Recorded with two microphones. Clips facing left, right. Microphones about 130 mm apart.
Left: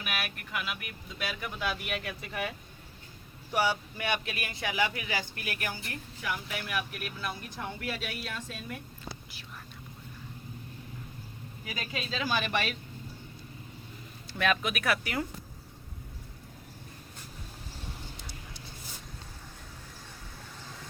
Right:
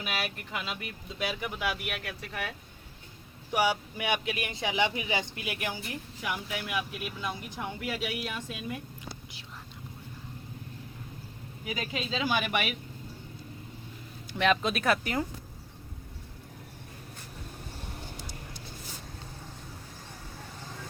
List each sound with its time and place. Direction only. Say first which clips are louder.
0.0 s speech: right 2 dB; 25° right (ahead or behind); by 2.5 s centre (ahead or behind)
3.5 s speech: right 2 dB; 10° right (ahead or behind)
11.6 s speech: right 4 dB; 20° right (ahead or behind)
14.3 s speech: right 3 dB; 25° right (ahead or behind)